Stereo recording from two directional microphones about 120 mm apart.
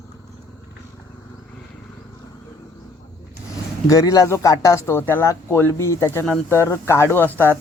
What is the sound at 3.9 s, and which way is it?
Speech, 30° left (ahead or behind).